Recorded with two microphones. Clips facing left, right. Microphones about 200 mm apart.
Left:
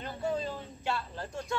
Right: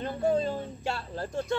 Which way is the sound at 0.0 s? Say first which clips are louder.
Right 7 dB; 50° right (ahead or behind).